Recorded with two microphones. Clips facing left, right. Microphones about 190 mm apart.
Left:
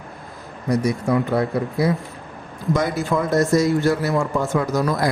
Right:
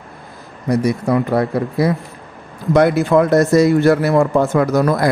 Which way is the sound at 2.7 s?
65° right (ahead or behind).